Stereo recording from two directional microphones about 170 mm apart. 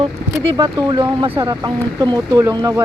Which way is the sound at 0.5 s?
20° right (ahead or behind).